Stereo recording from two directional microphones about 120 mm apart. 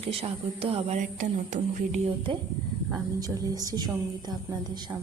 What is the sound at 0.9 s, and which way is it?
Speech, 90° right.